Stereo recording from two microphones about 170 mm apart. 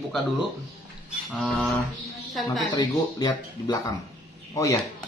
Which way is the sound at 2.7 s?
25° left (ahead or behind).